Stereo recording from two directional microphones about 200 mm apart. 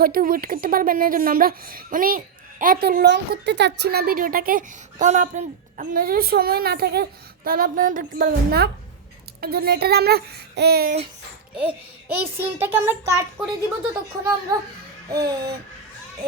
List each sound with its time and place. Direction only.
0.0 s speech: 45° right (ahead or behind)
11.5 s a child's voice: 10° right (ahead or behind)
15.1 s a child's voice: 15° right (ahead or behind)